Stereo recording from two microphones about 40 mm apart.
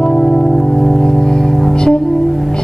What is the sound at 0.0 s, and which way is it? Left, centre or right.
Music, centre.